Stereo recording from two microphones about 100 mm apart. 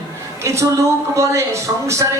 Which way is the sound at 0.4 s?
30° right (ahead or behind).